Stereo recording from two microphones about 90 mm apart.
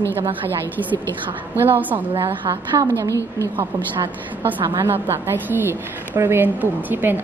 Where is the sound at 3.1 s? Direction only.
35° left (ahead or behind).